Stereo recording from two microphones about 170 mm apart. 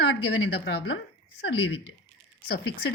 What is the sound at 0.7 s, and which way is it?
Speech, 85° left.